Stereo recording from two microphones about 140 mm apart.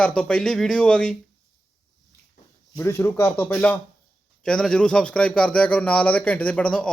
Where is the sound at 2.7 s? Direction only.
20° left (ahead or behind).